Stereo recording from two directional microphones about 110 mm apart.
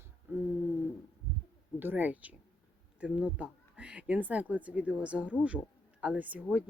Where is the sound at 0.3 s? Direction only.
20° right (ahead or behind).